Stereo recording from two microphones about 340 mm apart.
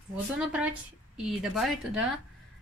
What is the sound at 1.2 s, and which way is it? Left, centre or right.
A woman's voice, centre.